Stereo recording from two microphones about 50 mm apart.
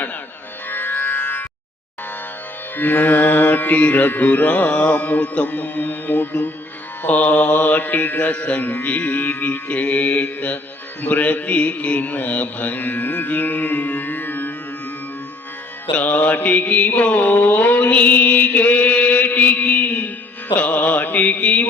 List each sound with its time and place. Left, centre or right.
0.7 s music: left
2.7 s mantra: left
16.0 s mantra: left